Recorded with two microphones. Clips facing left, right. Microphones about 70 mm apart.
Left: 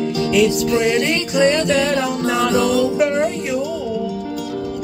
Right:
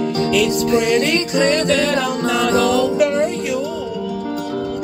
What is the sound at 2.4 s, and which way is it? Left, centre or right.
Music, right.